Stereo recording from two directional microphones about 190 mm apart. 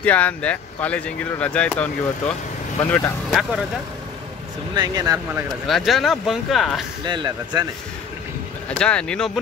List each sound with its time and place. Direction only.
0.0 s speech: 5° left (ahead or behind)
4.7 s speech: 20° right (ahead or behind)
5.7 s speech: centre (ahead or behind)
7.1 s speech: 25° right (ahead or behind)
8.6 s speech: 5° left (ahead or behind)